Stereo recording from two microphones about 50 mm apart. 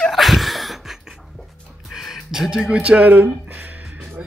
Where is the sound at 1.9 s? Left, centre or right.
Centre.